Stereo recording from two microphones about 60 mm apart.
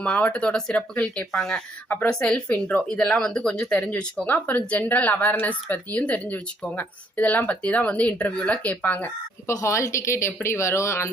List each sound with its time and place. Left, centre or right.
0.0 s speech: centre
3.2 s speech: centre
4.3 s speech: left
9.5 s a woman's voice: left